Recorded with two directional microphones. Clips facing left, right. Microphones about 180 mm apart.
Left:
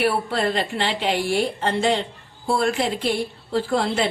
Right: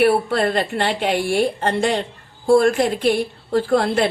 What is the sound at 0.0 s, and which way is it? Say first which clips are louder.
A woman's voice: right 5 dB; 55° right (ahead or behind).